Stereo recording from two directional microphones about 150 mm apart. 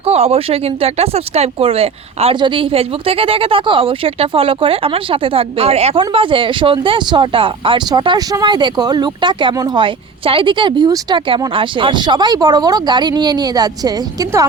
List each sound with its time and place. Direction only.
0.0 s speech: 45° right (ahead or behind); by 14.4 s 25° right (ahead or behind)